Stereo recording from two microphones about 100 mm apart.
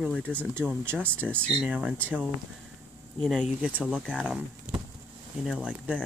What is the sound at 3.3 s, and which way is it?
Speech, 5° right (ahead or behind).